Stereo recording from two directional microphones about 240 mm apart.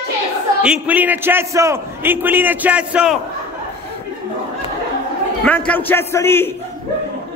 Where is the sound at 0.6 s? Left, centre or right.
Centre.